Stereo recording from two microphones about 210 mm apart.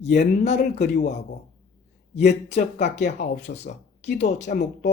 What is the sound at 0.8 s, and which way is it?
Speech, 50° left (ahead or behind).